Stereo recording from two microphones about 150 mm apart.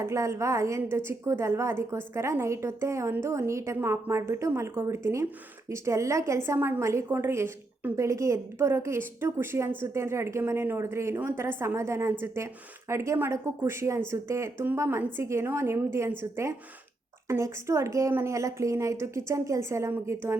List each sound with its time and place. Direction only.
0.0 s a woman's voice: 20° right (ahead or behind)